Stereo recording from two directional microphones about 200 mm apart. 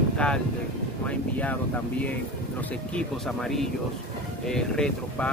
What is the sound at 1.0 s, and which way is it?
Speech, 5° left (ahead or behind).